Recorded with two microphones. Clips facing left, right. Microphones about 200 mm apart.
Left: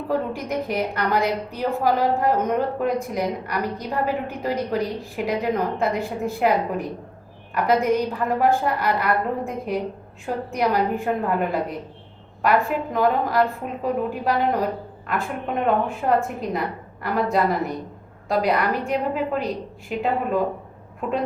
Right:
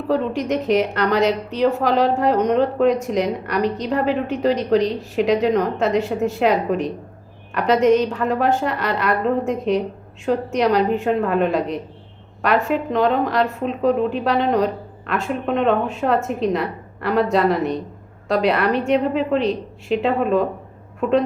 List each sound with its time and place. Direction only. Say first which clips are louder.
0.1 s a woman's voice: right 5 dB; 85° right